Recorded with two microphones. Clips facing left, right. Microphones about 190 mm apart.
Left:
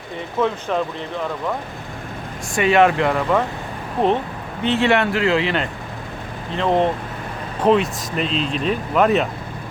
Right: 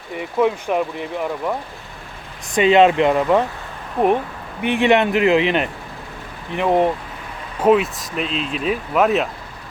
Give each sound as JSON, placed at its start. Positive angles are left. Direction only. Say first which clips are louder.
{"t": 0.2, "sound": "speech", "louder": "right 3 dB", "side_deg": -15}
{"t": 2.6, "sound": "speech", "louder": "right 3 dB", "side_deg": -20}
{"t": 4.6, "sound": "speech", "louder": "right 2 dB", "side_deg": -15}